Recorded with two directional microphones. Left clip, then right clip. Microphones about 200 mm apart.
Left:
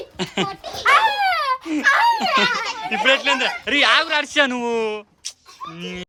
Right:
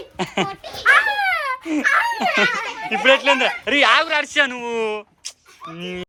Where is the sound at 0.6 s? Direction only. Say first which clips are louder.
Left 2 dB; 60° left (ahead or behind).